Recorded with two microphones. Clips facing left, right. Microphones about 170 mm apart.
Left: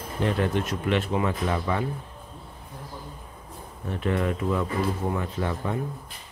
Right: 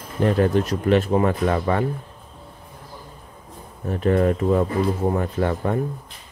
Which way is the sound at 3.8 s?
40° right (ahead or behind).